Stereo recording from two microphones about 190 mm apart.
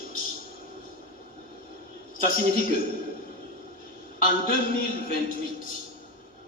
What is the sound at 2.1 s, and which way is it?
Speech, 50° left (ahead or behind).